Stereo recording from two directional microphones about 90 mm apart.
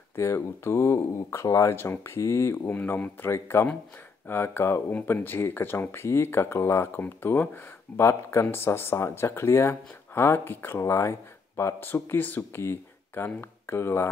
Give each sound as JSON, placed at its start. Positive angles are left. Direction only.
{"t": 0.1, "sound": "speech", "side_deg": 30}